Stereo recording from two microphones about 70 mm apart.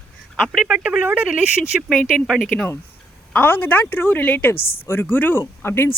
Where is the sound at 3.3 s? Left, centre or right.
Left.